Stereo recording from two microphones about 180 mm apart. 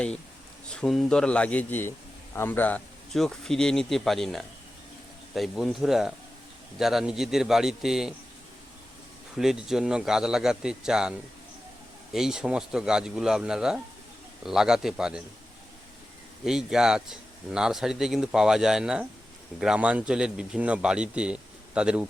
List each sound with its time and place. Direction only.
0.7 s speech: 5° left (ahead or behind)
9.3 s speech: 5° right (ahead or behind)
12.1 s speech: 5° right (ahead or behind)
16.4 s speech: 5° right (ahead or behind)